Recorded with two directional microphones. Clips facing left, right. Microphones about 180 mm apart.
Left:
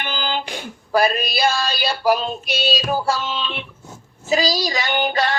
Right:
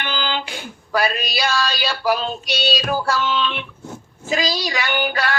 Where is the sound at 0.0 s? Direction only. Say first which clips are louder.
Even; 45° left (ahead or behind).